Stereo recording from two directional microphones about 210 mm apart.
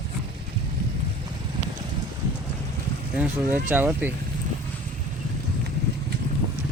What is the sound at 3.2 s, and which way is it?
Speech, 10° right (ahead or behind).